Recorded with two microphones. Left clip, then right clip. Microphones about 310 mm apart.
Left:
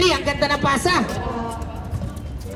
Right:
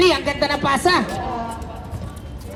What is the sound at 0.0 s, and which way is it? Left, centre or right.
Speech, right.